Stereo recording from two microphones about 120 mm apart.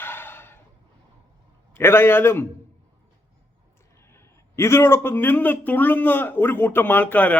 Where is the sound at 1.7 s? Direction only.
20° left (ahead or behind).